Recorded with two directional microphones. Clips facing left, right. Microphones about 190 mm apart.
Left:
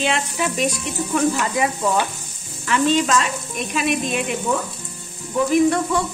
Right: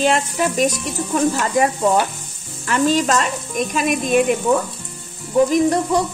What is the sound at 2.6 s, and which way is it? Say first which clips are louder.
Speech: right 1 dB; 45° right (ahead or behind).